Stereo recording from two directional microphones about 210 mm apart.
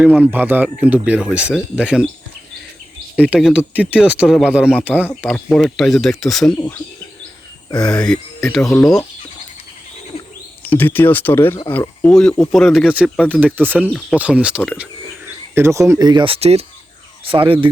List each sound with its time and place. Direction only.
0.0 s speech: 5° right (ahead or behind)
3.2 s speech: 5° right (ahead or behind)
7.8 s speech: 5° left (ahead or behind)
10.7 s speech: 10° left (ahead or behind)
12.0 s speech: 5° left (ahead or behind); by 17.7 s 25° right (ahead or behind)